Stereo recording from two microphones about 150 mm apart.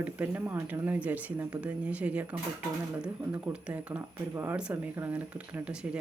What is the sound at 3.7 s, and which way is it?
Speech, 10° right (ahead or behind).